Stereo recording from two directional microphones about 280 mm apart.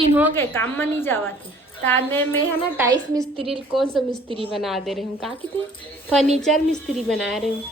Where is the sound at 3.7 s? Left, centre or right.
Centre.